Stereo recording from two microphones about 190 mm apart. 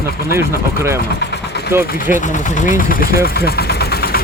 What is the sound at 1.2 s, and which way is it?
Vehicle, 60° left (ahead or behind).